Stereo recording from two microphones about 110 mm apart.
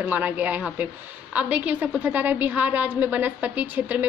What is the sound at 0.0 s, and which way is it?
A woman's voice, 15° right (ahead or behind).